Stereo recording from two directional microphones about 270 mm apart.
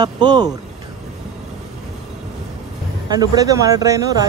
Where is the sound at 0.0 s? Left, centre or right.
Centre.